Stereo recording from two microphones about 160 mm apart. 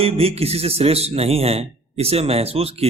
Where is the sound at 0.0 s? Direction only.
40° right (ahead or behind).